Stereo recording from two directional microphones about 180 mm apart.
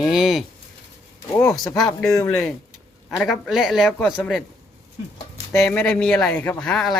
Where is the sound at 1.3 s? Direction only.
15° left (ahead or behind).